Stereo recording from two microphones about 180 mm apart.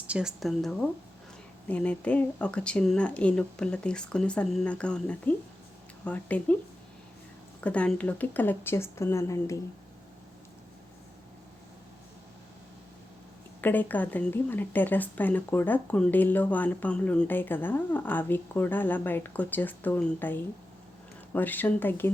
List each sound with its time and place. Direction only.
0.1 s speech: 5° right (ahead or behind)
7.6 s speech: 5° left (ahead or behind)
13.6 s speech: 10° left (ahead or behind)